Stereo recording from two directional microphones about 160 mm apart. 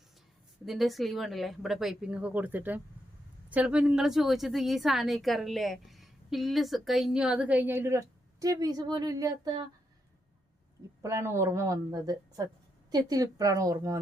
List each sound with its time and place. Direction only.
0.6 s a woman's voice: centre (ahead or behind); by 9.6 s 25° right (ahead or behind)
11.0 s a woman's voice: 15° right (ahead or behind)